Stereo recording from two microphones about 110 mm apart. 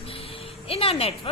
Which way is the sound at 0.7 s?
60° left (ahead or behind).